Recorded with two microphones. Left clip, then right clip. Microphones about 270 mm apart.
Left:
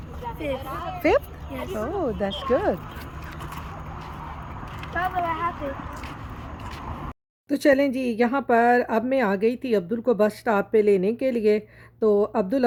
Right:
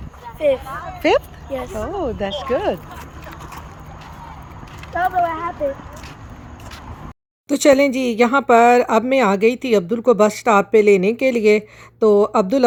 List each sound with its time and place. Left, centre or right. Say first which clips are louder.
0.7 s speech: right 2 dB; left
1.7 s speech: even; centre
4.9 s speech: right 7 dB; centre
7.4 s speech: right 6 dB; centre